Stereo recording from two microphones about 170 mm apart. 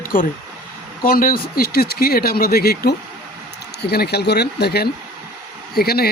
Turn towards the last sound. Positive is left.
turn(degrees=65)  # may be behind; listen again after turning